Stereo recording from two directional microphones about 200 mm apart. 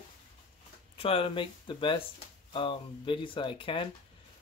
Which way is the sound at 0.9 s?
25° left (ahead or behind).